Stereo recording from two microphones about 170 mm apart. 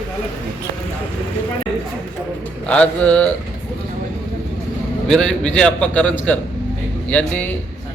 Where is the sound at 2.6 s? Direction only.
5° left (ahead or behind).